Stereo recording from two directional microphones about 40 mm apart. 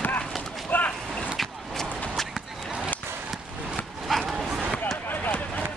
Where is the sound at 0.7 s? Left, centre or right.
Left.